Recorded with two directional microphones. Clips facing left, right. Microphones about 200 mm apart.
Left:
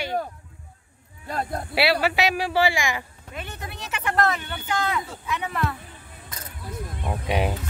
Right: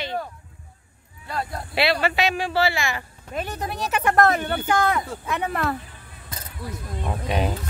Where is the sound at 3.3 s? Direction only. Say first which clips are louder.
Right 8 dB; 40° right (ahead or behind).